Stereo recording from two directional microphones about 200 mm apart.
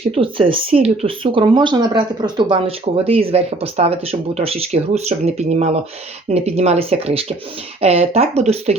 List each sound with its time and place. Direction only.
0.1 s speech: 25° right (ahead or behind)